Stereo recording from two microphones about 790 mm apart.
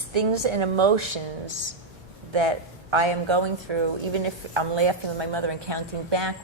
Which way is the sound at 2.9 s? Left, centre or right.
Right.